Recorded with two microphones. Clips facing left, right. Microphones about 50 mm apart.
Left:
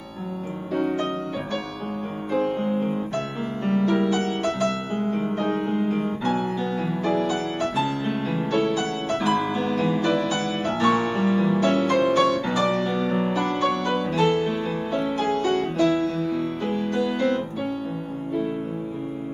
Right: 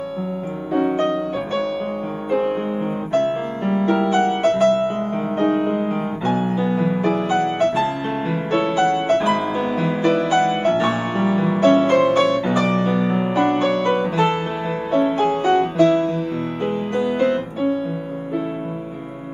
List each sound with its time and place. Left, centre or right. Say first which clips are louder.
0.7 s music: right 5 dB; right
4.0 s music: right 6 dB; right
7.2 s music: right 6 dB; right
11.7 s music: right 6 dB; right